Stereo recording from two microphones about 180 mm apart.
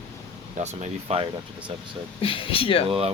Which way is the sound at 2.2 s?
30° left (ahead or behind).